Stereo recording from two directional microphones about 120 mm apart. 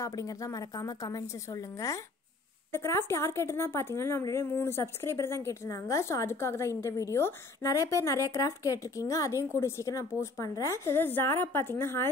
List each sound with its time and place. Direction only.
0.0 s speech: 30° left (ahead or behind)